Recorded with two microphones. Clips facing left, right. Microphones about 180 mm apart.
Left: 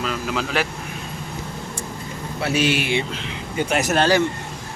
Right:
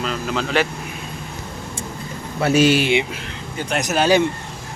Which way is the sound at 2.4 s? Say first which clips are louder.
Right 6 dB; 45° right (ahead or behind).